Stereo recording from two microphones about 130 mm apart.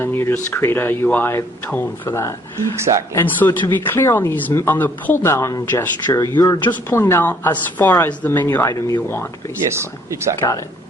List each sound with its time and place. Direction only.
0.0 s speech: 20° left (ahead or behind)
2.7 s speech: 20° right (ahead or behind)
3.1 s speech: 15° left (ahead or behind)
9.6 s speech: 20° right (ahead or behind)